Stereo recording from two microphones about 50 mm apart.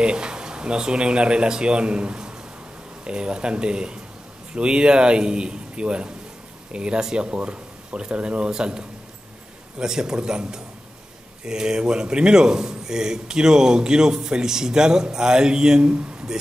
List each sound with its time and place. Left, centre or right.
0.0 s a man's voice: centre